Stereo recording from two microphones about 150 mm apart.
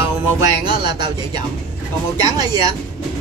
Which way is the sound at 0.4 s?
30° right (ahead or behind).